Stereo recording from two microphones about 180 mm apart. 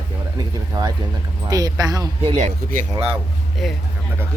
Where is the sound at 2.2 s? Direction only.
40° right (ahead or behind).